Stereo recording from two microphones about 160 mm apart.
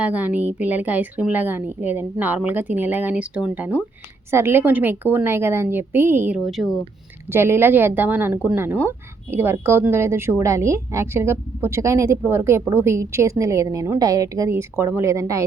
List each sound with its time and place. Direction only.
0.0 s speech: 10° right (ahead or behind)
7.3 s speech: 15° right (ahead or behind)